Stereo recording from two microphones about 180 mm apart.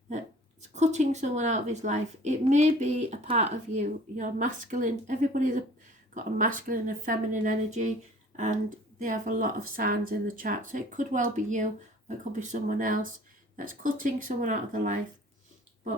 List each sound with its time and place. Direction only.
0.7 s speech: 40° right (ahead or behind)
9.0 s speech: 45° right (ahead or behind)